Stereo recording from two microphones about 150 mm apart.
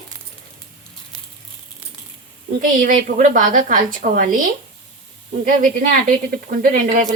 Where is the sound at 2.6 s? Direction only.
65° right (ahead or behind).